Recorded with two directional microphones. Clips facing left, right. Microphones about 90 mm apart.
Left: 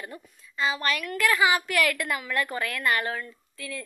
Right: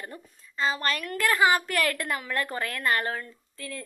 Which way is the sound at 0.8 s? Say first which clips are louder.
Left 1 dB; 35° right (ahead or behind).